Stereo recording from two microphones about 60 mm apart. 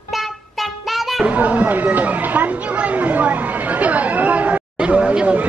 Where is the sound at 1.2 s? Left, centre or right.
Right.